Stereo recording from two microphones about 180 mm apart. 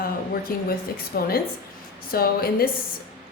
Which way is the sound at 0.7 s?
55° left (ahead or behind).